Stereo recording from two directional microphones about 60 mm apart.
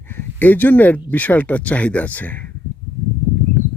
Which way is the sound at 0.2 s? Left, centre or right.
Left.